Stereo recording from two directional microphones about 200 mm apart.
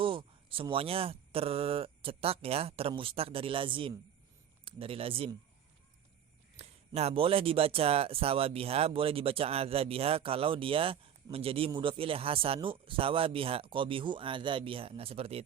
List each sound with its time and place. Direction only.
0.0 s speech: 25° right (ahead or behind)
6.6 s speech: 30° right (ahead or behind)